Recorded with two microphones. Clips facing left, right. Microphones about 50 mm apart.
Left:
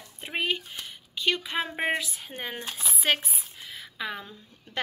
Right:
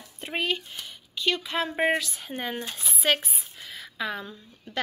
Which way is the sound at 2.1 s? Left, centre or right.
Centre.